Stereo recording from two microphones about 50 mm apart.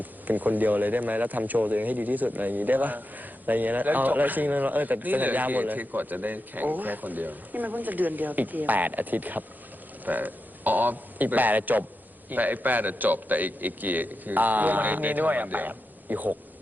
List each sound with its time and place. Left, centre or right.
0.0 s a man's voice: right